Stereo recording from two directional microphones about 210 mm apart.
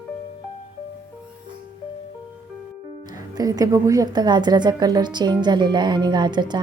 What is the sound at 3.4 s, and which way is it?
A woman's voice, 15° right (ahead or behind).